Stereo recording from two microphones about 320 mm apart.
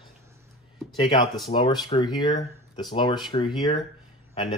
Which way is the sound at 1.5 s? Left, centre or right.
Centre.